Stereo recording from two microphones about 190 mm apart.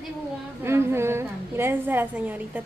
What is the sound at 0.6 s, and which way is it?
A woman's voice, 15° right (ahead or behind).